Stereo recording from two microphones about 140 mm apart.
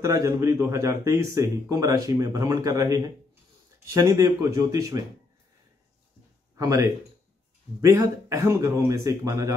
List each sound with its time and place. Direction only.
0.0 s speech: 20° right (ahead or behind)
6.6 s speech: 20° right (ahead or behind)